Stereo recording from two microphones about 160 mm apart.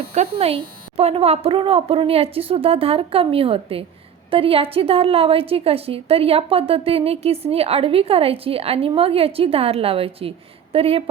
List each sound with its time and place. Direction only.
0.1 s a woman's voice: 45° right (ahead or behind)